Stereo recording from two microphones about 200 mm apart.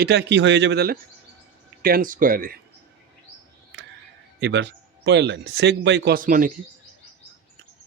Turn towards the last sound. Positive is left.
turn(degrees=-40)  # may be behind; listen again after turning